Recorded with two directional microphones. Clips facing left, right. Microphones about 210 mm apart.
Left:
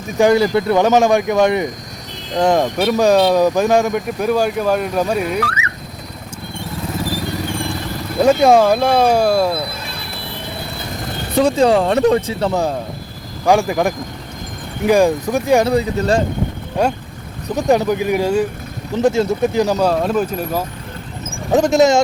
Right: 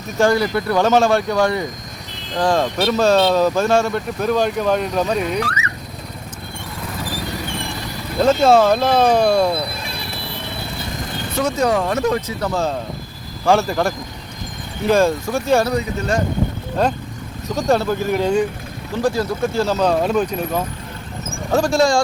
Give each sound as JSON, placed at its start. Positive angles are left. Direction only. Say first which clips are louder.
{"t": 0.2, "sound": "speech", "louder": "left 4 dB", "side_deg": 20}
{"t": 8.2, "sound": "speech", "louder": "left 2 dB", "side_deg": 15}
{"t": 11.3, "sound": "speech", "louder": "left 5 dB", "side_deg": 30}
{"t": 13.4, "sound": "speech", "louder": "left 2 dB", "side_deg": 15}
{"t": 15.6, "sound": "speech", "louder": "left 5 dB", "side_deg": 30}
{"t": 16.8, "sound": "speech", "louder": "left 2 dB", "side_deg": 15}
{"t": 19.0, "sound": "speech", "louder": "left 4 dB", "side_deg": 25}
{"t": 19.9, "sound": "speech", "louder": "even", "side_deg": 0}
{"t": 21.5, "sound": "speech", "louder": "left 4 dB", "side_deg": 20}